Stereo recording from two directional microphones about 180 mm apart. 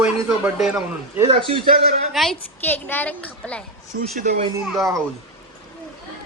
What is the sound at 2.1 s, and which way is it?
Speech, centre (ahead or behind).